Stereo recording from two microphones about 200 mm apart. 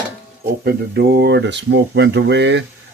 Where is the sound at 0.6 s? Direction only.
50° right (ahead or behind).